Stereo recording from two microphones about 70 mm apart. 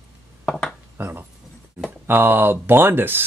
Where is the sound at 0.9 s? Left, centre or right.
Right.